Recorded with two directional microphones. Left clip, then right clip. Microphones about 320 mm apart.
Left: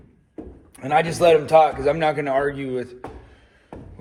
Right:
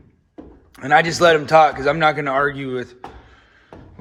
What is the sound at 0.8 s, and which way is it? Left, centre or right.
A man's voice, centre.